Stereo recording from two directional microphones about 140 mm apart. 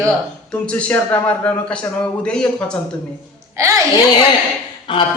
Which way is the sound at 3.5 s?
25° right (ahead or behind).